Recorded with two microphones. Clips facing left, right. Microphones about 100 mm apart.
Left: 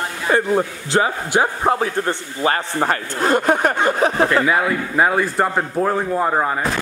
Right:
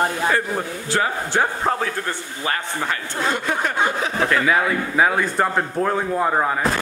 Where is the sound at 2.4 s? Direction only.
40° left (ahead or behind).